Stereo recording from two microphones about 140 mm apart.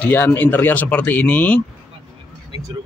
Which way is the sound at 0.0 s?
15° left (ahead or behind).